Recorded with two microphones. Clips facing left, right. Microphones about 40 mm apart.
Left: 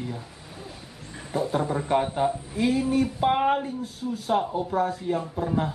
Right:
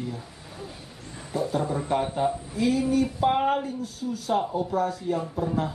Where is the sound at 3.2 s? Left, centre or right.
Centre.